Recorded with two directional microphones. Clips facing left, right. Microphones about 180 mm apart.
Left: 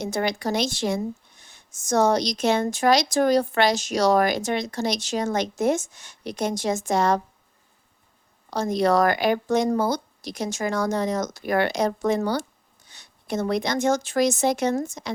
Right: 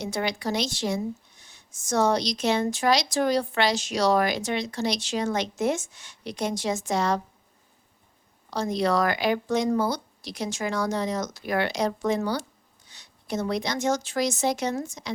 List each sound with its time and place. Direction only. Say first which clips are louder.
0.0 s speech: left 3 dB; 45° left (ahead or behind)
8.4 s a woman's voice: left 3 dB; 45° left (ahead or behind)